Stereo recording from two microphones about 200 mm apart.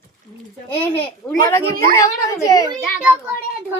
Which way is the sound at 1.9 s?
15° left (ahead or behind).